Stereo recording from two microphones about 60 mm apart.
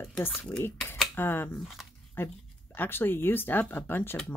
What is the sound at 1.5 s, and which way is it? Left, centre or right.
Speech, centre.